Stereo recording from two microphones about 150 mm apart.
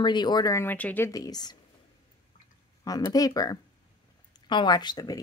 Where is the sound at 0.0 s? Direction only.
30° left (ahead or behind).